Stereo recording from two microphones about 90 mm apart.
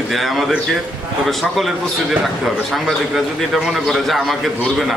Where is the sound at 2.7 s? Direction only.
Centre (ahead or behind).